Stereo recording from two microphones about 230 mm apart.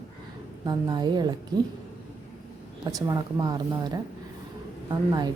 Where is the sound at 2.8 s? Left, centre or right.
Centre.